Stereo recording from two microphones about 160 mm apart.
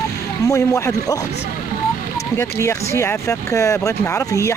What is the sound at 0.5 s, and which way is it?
Speech, 15° left (ahead or behind).